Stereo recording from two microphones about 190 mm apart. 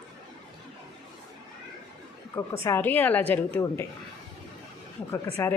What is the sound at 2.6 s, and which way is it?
Speech, 10° left (ahead or behind).